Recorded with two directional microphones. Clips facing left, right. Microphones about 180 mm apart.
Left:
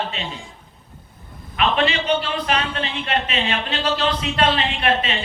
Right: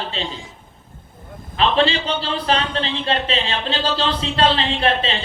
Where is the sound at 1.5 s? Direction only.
30° right (ahead or behind).